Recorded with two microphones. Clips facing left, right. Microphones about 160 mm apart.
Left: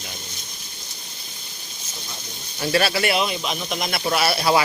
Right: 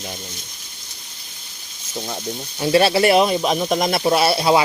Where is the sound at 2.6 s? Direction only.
25° right (ahead or behind).